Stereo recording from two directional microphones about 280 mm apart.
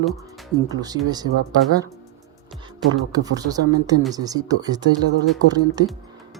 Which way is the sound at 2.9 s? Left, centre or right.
Centre.